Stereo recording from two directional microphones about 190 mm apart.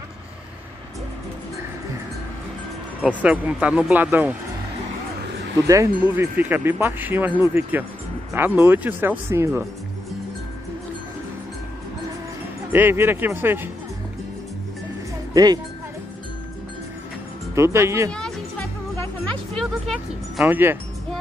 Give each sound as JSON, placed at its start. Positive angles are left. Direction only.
{"t": 3.0, "sound": "speech", "side_deg": -5}
{"t": 5.7, "sound": "speech", "side_deg": -15}
{"t": 12.7, "sound": "speech", "side_deg": -10}
{"t": 15.3, "sound": "speech", "side_deg": -20}
{"t": 17.6, "sound": "speech", "side_deg": -15}
{"t": 18.1, "sound": "music", "side_deg": 5}
{"t": 19.5, "sound": "speech", "side_deg": 0}